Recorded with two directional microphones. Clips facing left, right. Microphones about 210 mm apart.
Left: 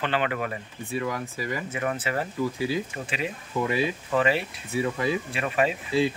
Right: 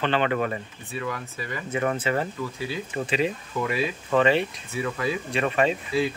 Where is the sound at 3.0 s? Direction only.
35° right (ahead or behind).